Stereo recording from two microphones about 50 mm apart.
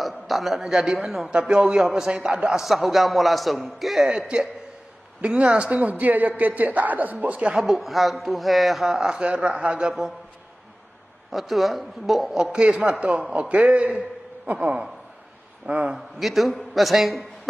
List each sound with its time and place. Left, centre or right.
0.0 s a man's voice: centre
5.2 s a man's voice: right
5.8 s a man's voice: right
7.5 s speech: centre; by 9.9 s right
11.3 s a man's voice: centre
12.5 s a man's voice: right
16.2 s a man's voice: centre